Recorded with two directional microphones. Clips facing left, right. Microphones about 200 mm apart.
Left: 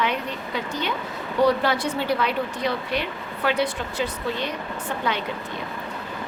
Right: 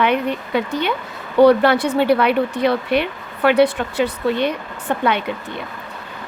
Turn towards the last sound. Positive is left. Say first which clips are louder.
# right 7 dB
turn(degrees=-65)  # may be behind; listen again after turning